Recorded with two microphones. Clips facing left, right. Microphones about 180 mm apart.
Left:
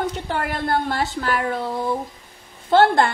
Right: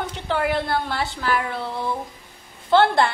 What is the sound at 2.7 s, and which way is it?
Speech, 45° left (ahead or behind).